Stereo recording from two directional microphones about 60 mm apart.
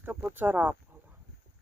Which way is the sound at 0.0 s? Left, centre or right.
Right.